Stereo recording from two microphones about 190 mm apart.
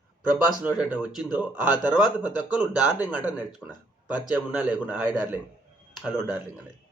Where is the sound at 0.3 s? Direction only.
10° right (ahead or behind).